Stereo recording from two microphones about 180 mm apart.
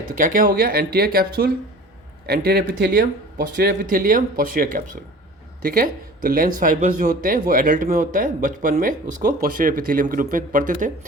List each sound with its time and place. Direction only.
0.2 s speech: 45° right (ahead or behind); by 2.9 s 65° right (ahead or behind)
3.6 s speech: 50° right (ahead or behind)